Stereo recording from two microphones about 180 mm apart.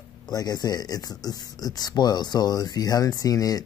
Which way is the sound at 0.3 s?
20° left (ahead or behind).